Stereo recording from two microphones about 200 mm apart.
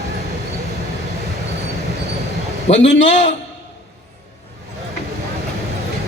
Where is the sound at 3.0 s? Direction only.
35° left (ahead or behind).